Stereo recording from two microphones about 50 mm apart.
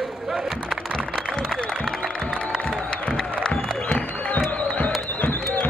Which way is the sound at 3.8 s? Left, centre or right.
Left.